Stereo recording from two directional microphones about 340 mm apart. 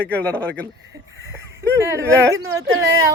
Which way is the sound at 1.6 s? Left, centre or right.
Centre.